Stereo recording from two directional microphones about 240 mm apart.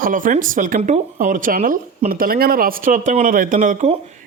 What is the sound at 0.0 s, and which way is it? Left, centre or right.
Speech, right.